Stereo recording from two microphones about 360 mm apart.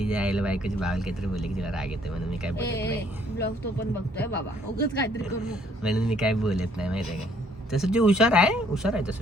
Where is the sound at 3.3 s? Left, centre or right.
Left.